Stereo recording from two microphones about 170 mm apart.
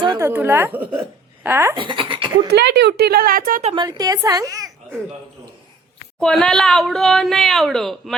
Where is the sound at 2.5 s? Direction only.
80° right; by 3.6 s 60° right (ahead or behind).